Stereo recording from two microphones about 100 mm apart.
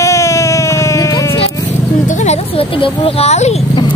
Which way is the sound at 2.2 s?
65° left (ahead or behind).